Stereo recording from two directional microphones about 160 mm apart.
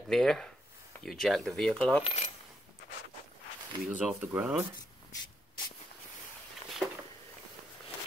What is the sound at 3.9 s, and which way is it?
Speech, 10° right (ahead or behind).